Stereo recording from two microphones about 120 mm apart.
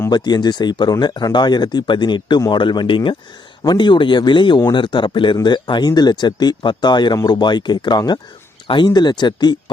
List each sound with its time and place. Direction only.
0.1 s speech: 35° left (ahead or behind)